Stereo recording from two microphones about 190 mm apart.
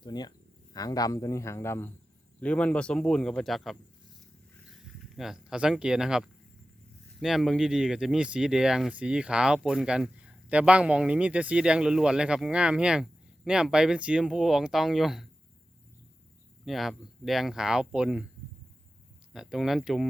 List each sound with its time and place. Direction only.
0.0 s speech: 20° left (ahead or behind); by 3.8 s centre (ahead or behind)
5.0 s speech: centre (ahead or behind)
16.6 s speech: centre (ahead or behind)
19.3 s speech: 5° right (ahead or behind)